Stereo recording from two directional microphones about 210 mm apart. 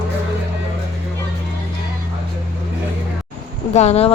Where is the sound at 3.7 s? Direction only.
30° left (ahead or behind).